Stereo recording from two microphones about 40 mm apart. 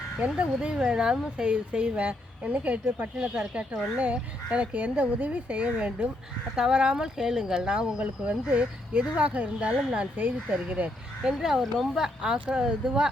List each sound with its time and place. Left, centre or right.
0.2 s speech: right
3.3 s speech: right
6.6 s speech: centre
8.0 s speech: right
10.7 s speech: right
11.3 s speech: centre
12.0 s speech: centre